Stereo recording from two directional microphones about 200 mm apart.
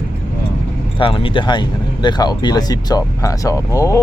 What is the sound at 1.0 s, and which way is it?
Speech, 25° left (ahead or behind).